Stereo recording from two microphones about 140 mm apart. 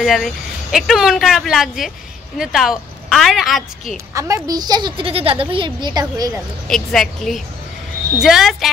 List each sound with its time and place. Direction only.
0.0 s speech: centre (ahead or behind)
4.1 s a woman's voice: 25° right (ahead or behind)
6.7 s speech: 5° left (ahead or behind)